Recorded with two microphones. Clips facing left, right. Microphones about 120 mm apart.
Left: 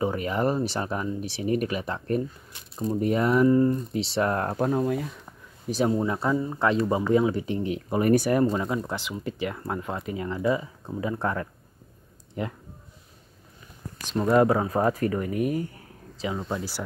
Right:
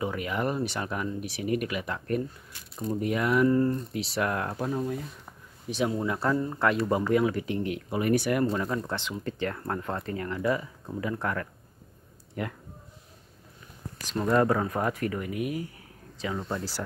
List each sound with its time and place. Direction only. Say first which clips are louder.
0.0 s speech: left 4 dB; 35° left (ahead or behind)
3.4 s speech: left 3 dB; 15° left (ahead or behind)
3.9 s speech: left 4 dB; 30° left (ahead or behind)
4.6 s speech: left 6 dB; 50° left (ahead or behind)
4.8 s speech: left 6 dB; 90° left
5.7 s speech: left 4 dB; 35° left (ahead or behind)
5.9 s speech: left 2 dB; 20° left (ahead or behind)
6.3 s speech: left 2 dB; 10° left (ahead or behind)
6.6 s speech: left 2 dB; 25° left (ahead or behind)
7.9 s speech: left 4 dB; 40° left (ahead or behind)
8.5 s speech: left 2 dB; 10° left (ahead or behind)
10.1 s speech: left 3 dB; 15° left (ahead or behind)
14.3 s speech: left 4 dB; 20° left (ahead or behind); by 15.6 s 40° left (ahead or behind)
16.3 s speech: left 2 dB; 5° left (ahead or behind)